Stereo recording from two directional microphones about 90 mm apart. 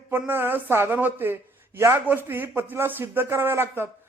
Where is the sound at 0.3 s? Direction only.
25° right (ahead or behind).